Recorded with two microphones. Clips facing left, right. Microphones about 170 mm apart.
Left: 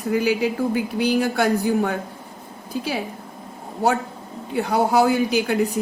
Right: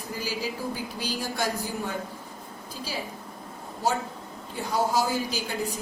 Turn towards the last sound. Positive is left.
turn(degrees=65)  # may be behind; listen again after turning